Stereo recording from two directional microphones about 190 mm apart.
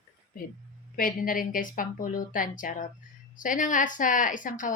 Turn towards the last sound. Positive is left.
turn(degrees=45)  # may be behind; listen again after turning